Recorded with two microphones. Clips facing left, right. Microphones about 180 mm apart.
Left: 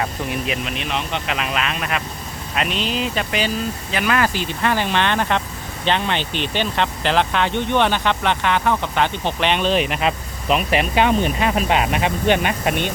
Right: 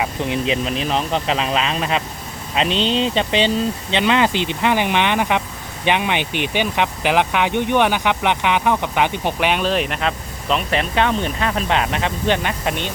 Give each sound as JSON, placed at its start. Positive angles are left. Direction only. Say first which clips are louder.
{"t": 0.2, "sound": "speech", "louder": "right 4 dB", "side_deg": -25}